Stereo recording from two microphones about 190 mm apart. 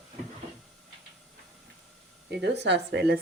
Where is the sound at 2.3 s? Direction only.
65° right (ahead or behind).